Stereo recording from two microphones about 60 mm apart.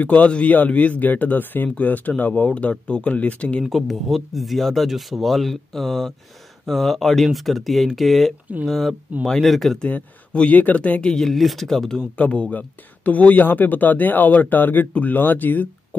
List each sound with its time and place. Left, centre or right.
0.0 s speech: left
3.7 s speech: centre
9.8 s speech: left
11.1 s speech: centre
12.2 s speech: left